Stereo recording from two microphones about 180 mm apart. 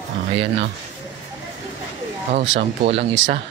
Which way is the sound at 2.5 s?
35° right (ahead or behind).